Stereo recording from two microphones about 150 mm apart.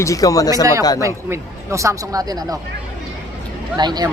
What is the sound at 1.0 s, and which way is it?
Speech, 20° right (ahead or behind).